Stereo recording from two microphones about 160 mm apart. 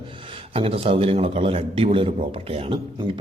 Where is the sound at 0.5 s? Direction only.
35° right (ahead or behind).